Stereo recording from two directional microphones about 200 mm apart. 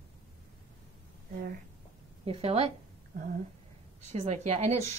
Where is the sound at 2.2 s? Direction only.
30° right (ahead or behind).